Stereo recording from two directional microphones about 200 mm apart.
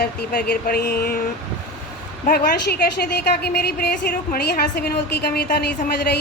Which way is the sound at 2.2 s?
50° left (ahead or behind).